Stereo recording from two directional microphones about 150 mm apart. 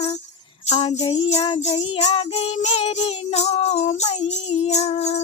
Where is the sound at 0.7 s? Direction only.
40° left (ahead or behind).